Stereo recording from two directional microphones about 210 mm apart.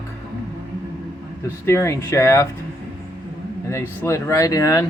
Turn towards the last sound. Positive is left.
turn(degrees=15)  # may be behind; listen again after turning